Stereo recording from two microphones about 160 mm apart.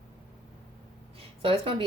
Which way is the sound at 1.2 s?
35° right (ahead or behind).